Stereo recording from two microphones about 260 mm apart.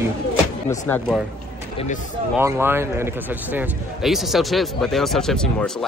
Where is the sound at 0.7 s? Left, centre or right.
Centre.